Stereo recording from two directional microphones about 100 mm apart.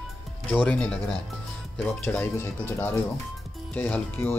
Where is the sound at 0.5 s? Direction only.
15° left (ahead or behind).